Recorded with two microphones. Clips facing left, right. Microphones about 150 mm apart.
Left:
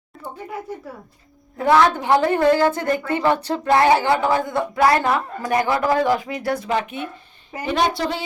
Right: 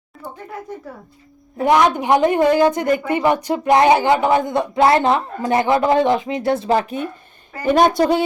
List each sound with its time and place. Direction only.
1.5 s a woman's voice: 20° right (ahead or behind); by 7.1 s 40° right (ahead or behind)
7.7 s a woman's voice: 50° right (ahead or behind)